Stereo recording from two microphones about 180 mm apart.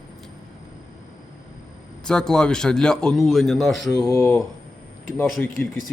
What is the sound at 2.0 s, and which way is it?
Speech, 5° left (ahead or behind).